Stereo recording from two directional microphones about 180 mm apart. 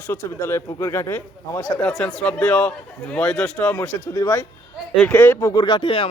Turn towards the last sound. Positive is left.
turn(degrees=30)  # may be behind; listen again after turning